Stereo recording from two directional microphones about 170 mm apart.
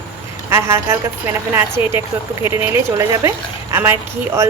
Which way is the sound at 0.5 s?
15° right (ahead or behind).